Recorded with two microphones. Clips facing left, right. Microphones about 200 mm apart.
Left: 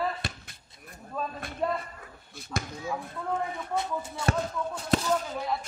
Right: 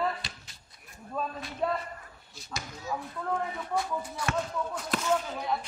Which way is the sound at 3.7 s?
25° left (ahead or behind).